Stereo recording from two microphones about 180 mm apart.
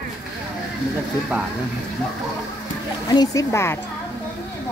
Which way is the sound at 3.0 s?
20° left (ahead or behind).